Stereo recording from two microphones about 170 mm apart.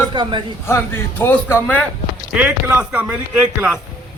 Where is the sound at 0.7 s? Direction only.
10° left (ahead or behind).